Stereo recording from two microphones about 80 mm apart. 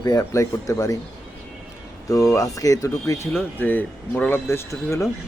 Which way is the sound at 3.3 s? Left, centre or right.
Left.